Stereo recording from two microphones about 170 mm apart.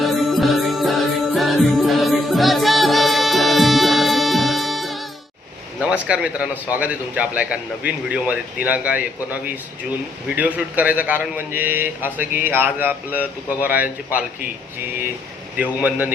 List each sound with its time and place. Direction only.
0.0 s music: centre (ahead or behind)
5.8 s a man's voice: 5° right (ahead or behind)
15.5 s a man's voice: 10° right (ahead or behind)